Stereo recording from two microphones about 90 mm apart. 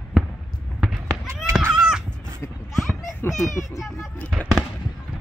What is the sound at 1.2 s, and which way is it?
Run, 30° right (ahead or behind).